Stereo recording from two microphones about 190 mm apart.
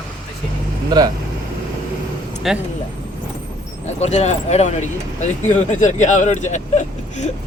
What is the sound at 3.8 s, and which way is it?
Speech, 35° left (ahead or behind).